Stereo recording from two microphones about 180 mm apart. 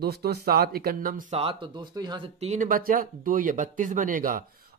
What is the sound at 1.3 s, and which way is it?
Speech, 35° right (ahead or behind).